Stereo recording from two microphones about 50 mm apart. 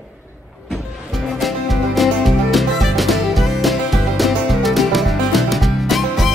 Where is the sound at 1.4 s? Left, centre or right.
Centre.